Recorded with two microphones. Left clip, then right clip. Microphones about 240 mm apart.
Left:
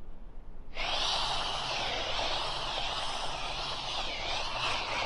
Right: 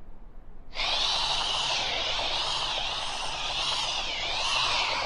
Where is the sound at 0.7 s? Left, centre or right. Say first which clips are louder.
Right 4 dB; centre.